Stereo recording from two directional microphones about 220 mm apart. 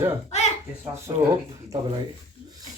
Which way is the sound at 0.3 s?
30° left (ahead or behind).